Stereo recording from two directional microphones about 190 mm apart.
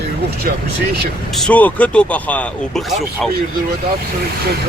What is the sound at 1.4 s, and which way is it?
Speech, 5° left (ahead or behind).